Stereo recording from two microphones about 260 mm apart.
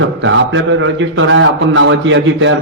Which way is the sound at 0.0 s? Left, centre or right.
Right.